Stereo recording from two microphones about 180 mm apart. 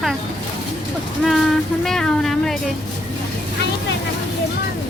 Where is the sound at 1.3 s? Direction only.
Centre (ahead or behind).